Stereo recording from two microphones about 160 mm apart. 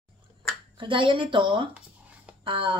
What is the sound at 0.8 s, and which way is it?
Speech, 30° right (ahead or behind).